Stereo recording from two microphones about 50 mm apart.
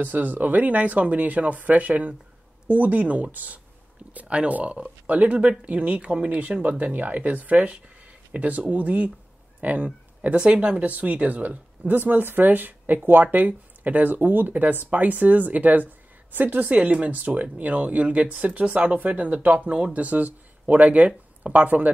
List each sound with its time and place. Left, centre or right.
0.0 s speech: right
4.3 s speech: right
10.3 s speech: right